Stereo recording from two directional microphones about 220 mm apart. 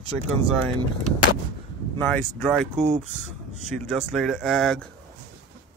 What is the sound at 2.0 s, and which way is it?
Speech, centre (ahead or behind).